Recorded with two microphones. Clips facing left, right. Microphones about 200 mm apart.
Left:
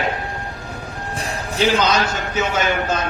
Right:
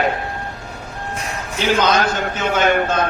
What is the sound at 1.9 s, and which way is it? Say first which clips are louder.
A man's voice: right 1 dB; 55° right (ahead or behind).